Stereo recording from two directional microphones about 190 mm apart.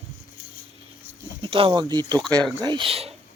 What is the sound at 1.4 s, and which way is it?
A man's voice, 30° right (ahead or behind).